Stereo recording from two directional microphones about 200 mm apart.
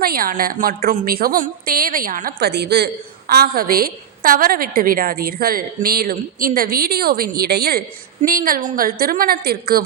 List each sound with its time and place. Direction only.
0.0 s a woman's voice: 45° right (ahead or behind)